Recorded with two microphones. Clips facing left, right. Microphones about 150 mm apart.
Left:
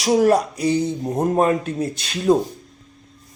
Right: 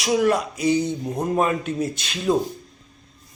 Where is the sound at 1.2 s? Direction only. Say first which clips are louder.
Left 4 dB; 45° left (ahead or behind).